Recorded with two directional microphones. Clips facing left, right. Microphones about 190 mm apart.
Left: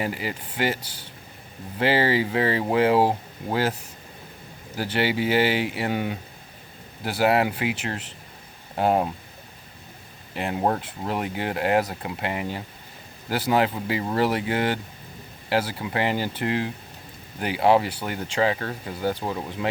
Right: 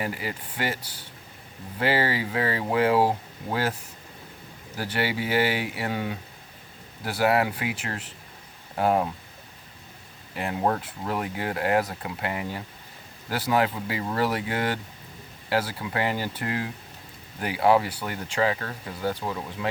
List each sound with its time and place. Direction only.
0.0 s speech: 25° left (ahead or behind)
1.8 s speech: 25° left (ahead or behind)
4.8 s speech: 25° left (ahead or behind)
10.3 s speech: 20° left (ahead or behind)